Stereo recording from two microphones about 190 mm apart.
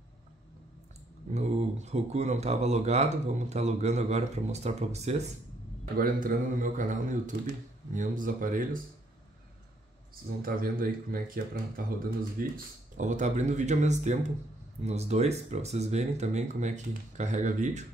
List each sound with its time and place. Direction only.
1.3 s speech: 35° right (ahead or behind)
5.9 s speech: 45° right (ahead or behind)
10.4 s speech: 50° right (ahead or behind)